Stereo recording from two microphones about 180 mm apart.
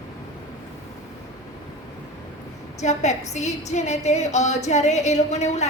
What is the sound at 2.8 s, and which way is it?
A woman's voice, 40° left (ahead or behind).